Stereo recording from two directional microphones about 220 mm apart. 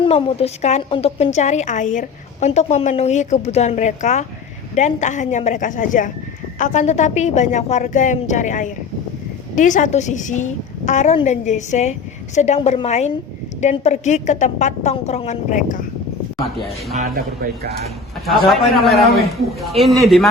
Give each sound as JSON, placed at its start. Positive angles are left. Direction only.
{"t": 0.0, "sound": "a woman's voice", "side_deg": 25}
{"t": 17.2, "sound": "speech", "side_deg": -45}
{"t": 18.3, "sound": "a man's voice", "side_deg": 0}